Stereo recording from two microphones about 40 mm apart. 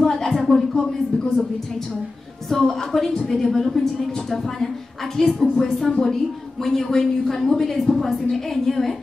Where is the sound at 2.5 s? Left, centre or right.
Centre.